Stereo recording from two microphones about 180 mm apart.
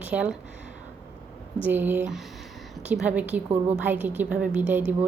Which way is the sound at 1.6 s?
10° right (ahead or behind).